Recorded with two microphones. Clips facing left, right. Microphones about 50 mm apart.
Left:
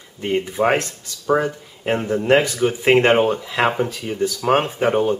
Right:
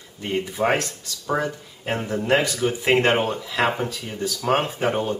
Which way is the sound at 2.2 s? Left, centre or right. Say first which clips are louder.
Left 4 dB; left.